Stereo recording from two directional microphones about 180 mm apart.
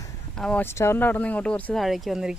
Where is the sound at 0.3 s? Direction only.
5° left (ahead or behind).